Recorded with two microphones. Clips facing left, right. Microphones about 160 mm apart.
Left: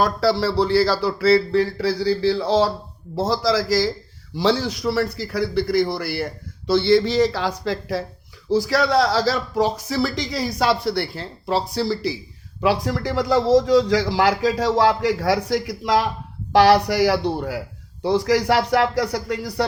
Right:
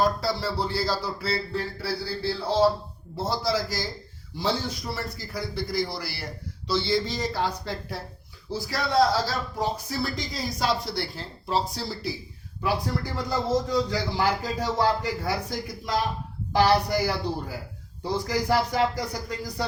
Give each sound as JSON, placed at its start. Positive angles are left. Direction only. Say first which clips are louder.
{"t": 0.0, "sound": "a man's voice", "louder": "left 6 dB", "side_deg": 75}
{"t": 12.6, "sound": "a man's voice", "louder": "left 7 dB", "side_deg": 90}